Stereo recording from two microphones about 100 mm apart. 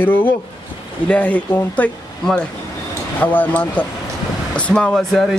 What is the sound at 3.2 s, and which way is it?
Speech, 15° left (ahead or behind).